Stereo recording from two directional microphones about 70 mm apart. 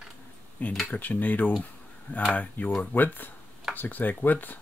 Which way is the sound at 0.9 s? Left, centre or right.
Left.